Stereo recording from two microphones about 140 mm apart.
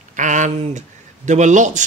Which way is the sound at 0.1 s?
60° right (ahead or behind).